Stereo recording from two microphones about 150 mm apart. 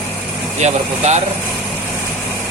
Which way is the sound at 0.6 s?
50° right (ahead or behind).